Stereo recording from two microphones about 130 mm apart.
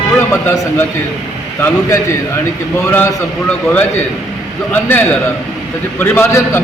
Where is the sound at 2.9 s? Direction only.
15° left (ahead or behind).